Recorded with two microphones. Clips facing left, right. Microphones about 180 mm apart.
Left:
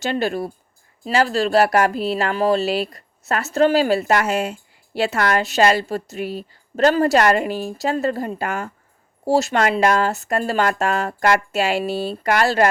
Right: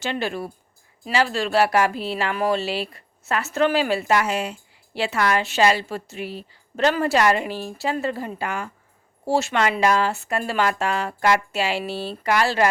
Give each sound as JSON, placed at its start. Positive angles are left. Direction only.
{"t": 0.0, "sound": "speech", "side_deg": 40}
{"t": 4.1, "sound": "speech", "side_deg": 50}